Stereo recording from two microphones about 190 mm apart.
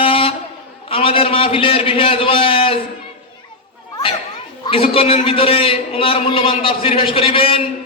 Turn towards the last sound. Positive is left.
turn(degrees=30)  # may be behind; listen again after turning